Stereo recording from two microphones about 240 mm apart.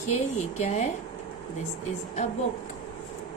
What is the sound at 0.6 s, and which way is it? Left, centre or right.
Speech, left.